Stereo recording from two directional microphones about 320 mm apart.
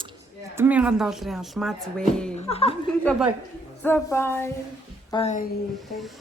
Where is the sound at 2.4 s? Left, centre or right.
Centre.